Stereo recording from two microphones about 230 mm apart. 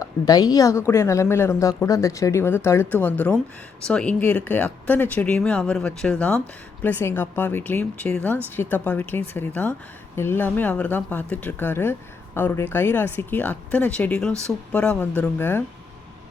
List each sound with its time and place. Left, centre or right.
0.0 s speech: centre